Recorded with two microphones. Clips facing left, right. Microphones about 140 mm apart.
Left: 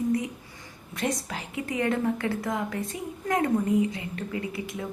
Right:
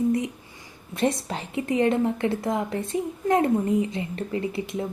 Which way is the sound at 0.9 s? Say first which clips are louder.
Right 5 dB; 25° right (ahead or behind).